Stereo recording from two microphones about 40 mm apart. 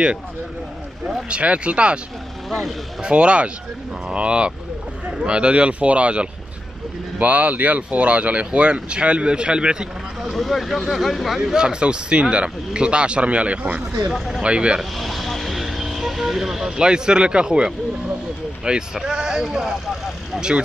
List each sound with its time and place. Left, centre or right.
1.3 s speech: right
3.0 s speech: right
10.3 s speech: centre
11.5 s speech: right
14.1 s speech: centre
14.4 s speech: right
14.8 s speech: centre